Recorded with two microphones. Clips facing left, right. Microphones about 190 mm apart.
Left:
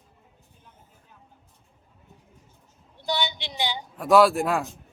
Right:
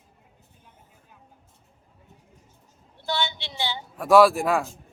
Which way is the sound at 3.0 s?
15° left (ahead or behind).